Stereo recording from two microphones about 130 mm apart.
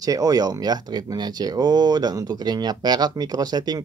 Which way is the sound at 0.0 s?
25° right (ahead or behind).